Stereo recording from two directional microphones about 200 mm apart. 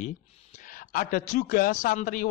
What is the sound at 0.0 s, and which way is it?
Speech, 40° left (ahead or behind).